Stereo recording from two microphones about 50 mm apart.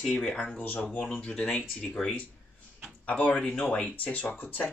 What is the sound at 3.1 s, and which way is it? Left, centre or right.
Speech, left.